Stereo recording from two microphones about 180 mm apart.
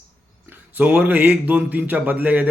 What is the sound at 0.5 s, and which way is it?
Speech, 10° right (ahead or behind).